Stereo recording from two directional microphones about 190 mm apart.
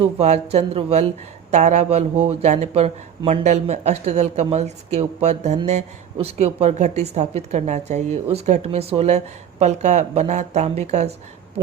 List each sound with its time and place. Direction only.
0.0 s a woman's voice: 35° right (ahead or behind)